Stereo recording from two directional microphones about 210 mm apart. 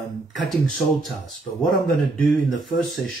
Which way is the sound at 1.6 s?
Centre (ahead or behind).